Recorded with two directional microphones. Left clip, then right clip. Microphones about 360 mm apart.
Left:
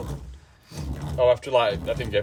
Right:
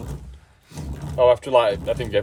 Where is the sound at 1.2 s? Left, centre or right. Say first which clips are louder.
Right 4 dB; centre.